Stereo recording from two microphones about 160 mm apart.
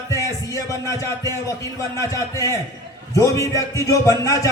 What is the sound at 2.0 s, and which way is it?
A man's voice, 20° left (ahead or behind).